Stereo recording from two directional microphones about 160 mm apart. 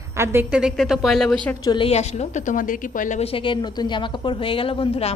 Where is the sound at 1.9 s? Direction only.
40° left (ahead or behind).